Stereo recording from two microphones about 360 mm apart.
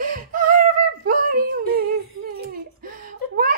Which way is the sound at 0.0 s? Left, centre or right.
Right.